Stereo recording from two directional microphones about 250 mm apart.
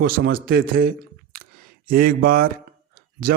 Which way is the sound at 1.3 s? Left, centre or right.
Right.